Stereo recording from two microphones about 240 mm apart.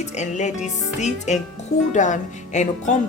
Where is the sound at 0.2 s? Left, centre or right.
Left.